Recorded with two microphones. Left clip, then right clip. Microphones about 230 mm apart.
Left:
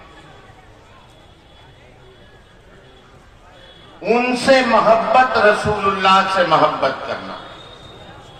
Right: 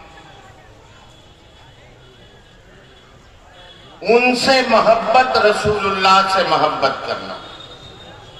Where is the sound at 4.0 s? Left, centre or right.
Right.